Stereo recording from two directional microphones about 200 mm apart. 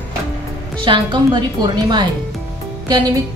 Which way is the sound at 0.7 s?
25° right (ahead or behind).